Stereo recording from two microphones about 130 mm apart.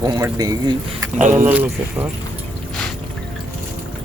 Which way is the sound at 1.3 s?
15° right (ahead or behind).